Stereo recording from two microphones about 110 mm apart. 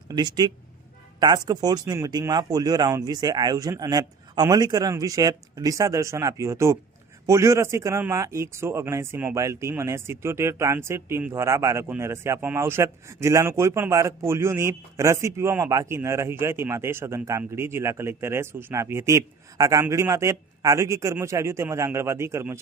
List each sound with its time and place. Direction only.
0.1 s speech: 40° right (ahead or behind)